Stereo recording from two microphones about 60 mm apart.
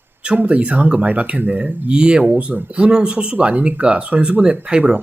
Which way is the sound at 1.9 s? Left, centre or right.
Centre.